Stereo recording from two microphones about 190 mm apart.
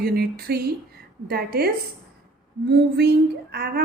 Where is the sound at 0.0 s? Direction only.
55° right (ahead or behind).